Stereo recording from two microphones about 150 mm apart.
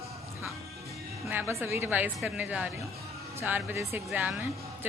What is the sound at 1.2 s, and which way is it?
Speech, 15° right (ahead or behind).